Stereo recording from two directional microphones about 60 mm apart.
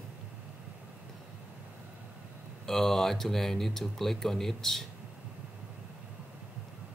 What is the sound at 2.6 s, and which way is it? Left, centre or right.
Speech, centre.